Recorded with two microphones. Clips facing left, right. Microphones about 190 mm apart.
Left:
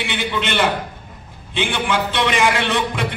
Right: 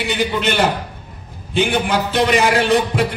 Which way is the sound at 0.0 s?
40° right (ahead or behind).